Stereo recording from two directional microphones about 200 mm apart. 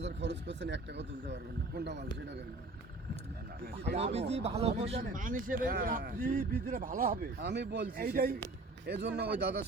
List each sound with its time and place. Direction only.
0.0 s speech: 60° right (ahead or behind)
3.9 s speech: 30° right (ahead or behind)
4.9 s speech: 45° right (ahead or behind)
8.9 s speech: 60° right (ahead or behind)